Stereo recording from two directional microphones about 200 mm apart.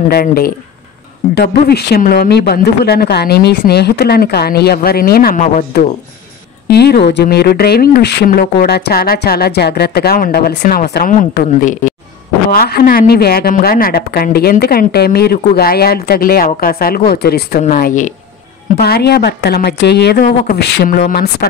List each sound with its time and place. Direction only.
0.1 s a woman's voice: 50° left (ahead or behind)
10.6 s a woman's voice: 40° left (ahead or behind)
12.4 s a woman's voice: 50° left (ahead or behind)
18.8 s a woman's voice: 50° left (ahead or behind)